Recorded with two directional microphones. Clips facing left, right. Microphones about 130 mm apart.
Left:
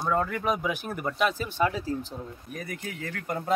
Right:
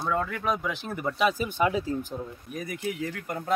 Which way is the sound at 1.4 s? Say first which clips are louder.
Right 2 dB; 15° right (ahead or behind).